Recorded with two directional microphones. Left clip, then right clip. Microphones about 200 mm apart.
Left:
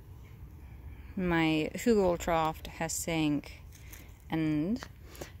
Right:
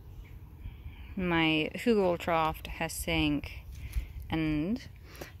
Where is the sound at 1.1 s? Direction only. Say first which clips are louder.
Right 1 dB; 10° left (ahead or behind).